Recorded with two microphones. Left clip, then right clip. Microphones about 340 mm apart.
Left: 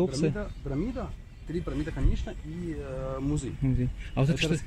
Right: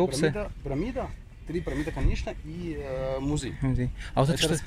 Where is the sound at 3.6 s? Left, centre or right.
Right.